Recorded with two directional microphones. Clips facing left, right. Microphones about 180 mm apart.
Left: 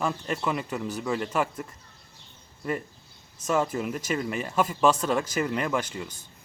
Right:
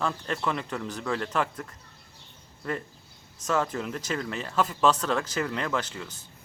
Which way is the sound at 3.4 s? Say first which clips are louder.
Left 2 dB; 10° left (ahead or behind).